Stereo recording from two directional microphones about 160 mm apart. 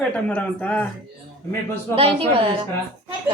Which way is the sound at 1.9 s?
35° right (ahead or behind).